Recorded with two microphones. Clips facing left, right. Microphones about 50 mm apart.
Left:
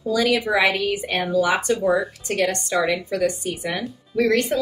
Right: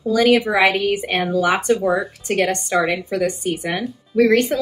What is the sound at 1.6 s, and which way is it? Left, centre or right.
Speech, right.